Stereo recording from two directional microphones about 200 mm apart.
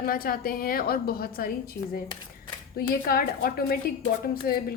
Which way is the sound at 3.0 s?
45° left (ahead or behind).